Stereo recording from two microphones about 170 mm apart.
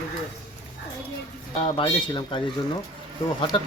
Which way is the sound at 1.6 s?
30° left (ahead or behind).